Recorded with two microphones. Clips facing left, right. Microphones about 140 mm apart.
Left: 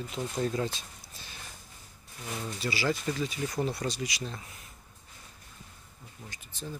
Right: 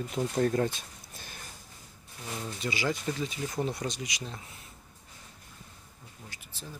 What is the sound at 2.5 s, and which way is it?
Speech, 20° right (ahead or behind).